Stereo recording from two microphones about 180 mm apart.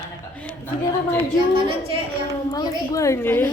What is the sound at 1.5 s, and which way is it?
Speech, 30° right (ahead or behind).